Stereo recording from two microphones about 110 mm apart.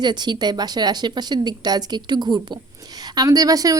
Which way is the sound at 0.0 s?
40° right (ahead or behind).